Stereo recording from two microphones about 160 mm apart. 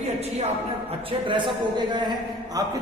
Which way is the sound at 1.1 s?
30° right (ahead or behind).